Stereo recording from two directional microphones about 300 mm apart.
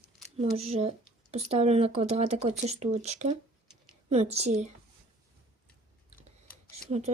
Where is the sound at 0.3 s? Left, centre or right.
Centre.